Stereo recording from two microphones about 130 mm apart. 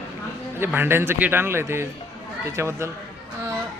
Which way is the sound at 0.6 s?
15° right (ahead or behind).